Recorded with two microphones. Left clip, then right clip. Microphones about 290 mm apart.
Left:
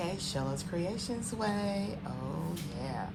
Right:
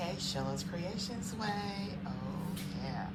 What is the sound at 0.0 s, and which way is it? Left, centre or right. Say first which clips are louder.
A woman's voice: left 2 dB; centre.